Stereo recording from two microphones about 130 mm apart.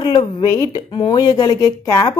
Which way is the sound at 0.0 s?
30° left (ahead or behind).